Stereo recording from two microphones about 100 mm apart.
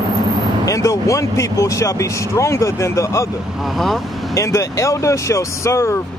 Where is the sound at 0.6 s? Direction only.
35° left (ahead or behind).